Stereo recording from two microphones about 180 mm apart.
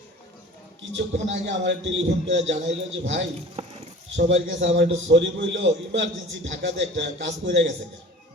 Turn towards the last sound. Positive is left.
turn(degrees=-80)